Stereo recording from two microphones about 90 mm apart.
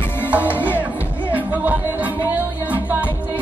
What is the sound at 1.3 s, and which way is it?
Music, 20° right (ahead or behind).